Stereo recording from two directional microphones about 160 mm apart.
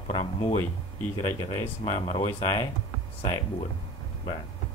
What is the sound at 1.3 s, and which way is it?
Speech, 20° left (ahead or behind).